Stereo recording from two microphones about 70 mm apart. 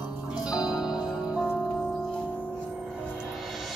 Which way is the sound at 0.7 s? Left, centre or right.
Centre.